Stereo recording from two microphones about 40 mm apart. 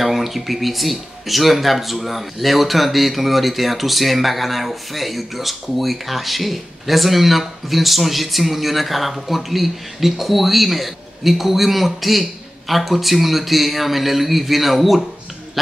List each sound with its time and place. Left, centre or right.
0.0 s speech: centre